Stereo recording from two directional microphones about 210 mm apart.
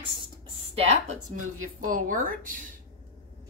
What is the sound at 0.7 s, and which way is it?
A woman's voice, 30° right (ahead or behind).